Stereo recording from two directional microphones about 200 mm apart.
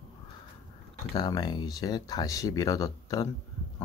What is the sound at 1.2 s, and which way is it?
Speech, 20° left (ahead or behind).